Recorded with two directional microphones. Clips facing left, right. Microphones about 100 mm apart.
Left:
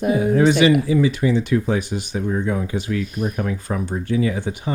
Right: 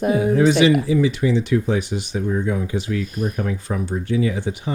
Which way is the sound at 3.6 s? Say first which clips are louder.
Even; 45° left (ahead or behind).